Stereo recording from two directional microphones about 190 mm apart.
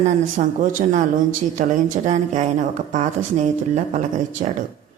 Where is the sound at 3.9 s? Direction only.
40° right (ahead or behind).